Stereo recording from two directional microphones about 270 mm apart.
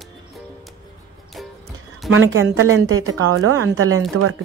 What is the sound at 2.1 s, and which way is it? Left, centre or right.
A woman's voice, right.